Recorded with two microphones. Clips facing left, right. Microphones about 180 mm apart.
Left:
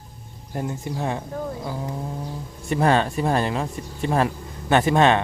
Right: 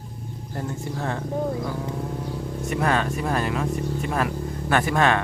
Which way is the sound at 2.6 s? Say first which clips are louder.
Left 4 dB; 30° left (ahead or behind).